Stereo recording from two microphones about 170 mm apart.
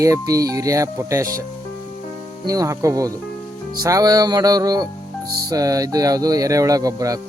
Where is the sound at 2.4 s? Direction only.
20° right (ahead or behind).